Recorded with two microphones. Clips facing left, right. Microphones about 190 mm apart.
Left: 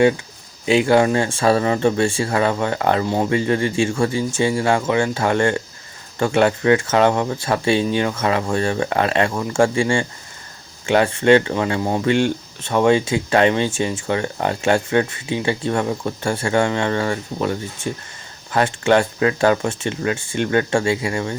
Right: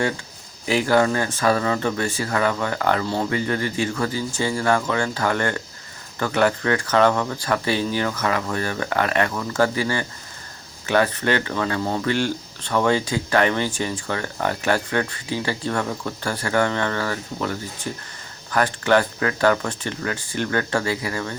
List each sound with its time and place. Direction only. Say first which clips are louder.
0.6 s speech: left 4 dB; 20° left (ahead or behind)